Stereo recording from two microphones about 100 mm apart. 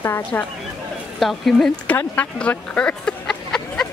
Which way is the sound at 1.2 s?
Centre (ahead or behind).